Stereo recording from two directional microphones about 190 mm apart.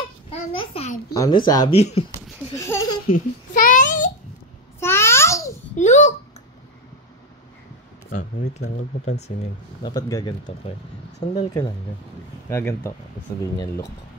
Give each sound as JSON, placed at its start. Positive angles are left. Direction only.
{"t": 0.3, "sound": "a child's voice", "side_deg": 30}
{"t": 1.7, "sound": "speech", "side_deg": 30}
{"t": 2.5, "sound": "a sound", "side_deg": 15}
{"t": 3.1, "sound": "babbling", "side_deg": 45}
{"t": 4.7, "sound": "babbling", "side_deg": 15}
{"t": 5.8, "sound": "speech", "side_deg": 40}
{"t": 8.1, "sound": "speech", "side_deg": 40}
{"t": 9.8, "sound": "speech", "side_deg": 20}
{"t": 12.4, "sound": "speech", "side_deg": 15}